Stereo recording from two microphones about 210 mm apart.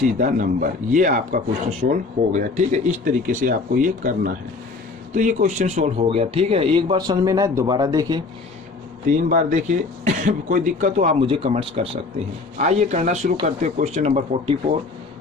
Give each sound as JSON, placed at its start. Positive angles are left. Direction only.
{"t": 0.2, "sound": "speech", "side_deg": -40}
{"t": 9.0, "sound": "speech", "side_deg": -35}